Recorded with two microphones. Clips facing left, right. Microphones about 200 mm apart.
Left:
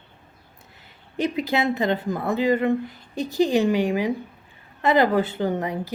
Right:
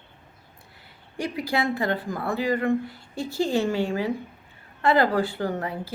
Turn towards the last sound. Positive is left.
turn(degrees=20)  # may be behind; listen again after turning